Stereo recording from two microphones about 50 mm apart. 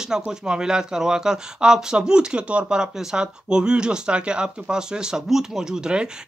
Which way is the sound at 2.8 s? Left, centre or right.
Centre.